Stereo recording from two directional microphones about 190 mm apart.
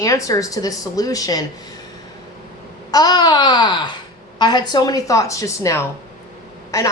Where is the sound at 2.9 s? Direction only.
20° left (ahead or behind).